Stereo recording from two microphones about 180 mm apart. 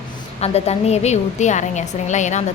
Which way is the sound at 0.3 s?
35° left (ahead or behind).